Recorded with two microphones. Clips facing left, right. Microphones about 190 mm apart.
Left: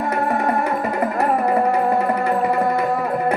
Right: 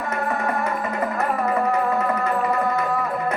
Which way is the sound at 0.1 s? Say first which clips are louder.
Left 3 dB; 35° left (ahead or behind).